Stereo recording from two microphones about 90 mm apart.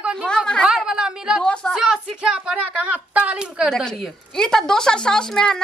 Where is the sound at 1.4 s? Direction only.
10° left (ahead or behind).